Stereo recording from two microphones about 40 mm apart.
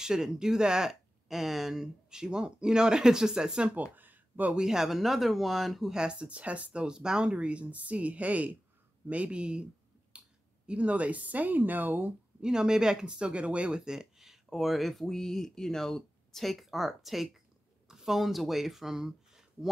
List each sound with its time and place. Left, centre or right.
0.0 s speech: centre
3.7 s a sound: right
4.6 s speech: centre
4.8 s speech: centre
5.9 s speech: right
10.1 s clicking: right
10.7 s speech: right
12.4 s speech: centre
14.1 s speech: centre